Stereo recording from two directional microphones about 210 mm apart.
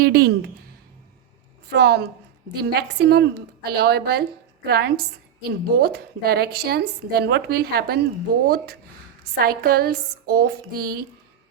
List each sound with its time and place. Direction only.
0.0 s a woman's voice: 50° right (ahead or behind)
1.7 s a woman's voice: 50° right (ahead or behind)